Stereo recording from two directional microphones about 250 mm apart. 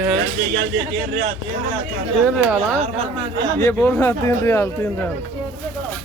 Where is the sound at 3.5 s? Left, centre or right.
Centre.